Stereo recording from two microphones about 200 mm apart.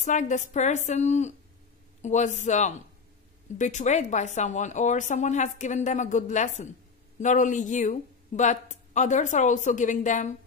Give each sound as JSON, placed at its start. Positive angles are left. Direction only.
{"t": 0.0, "sound": "speech", "side_deg": 40}